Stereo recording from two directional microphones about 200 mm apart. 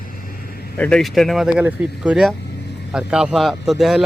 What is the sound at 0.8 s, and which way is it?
Speech, 5° left (ahead or behind).